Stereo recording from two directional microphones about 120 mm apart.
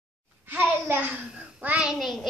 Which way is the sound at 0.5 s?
15° right (ahead or behind).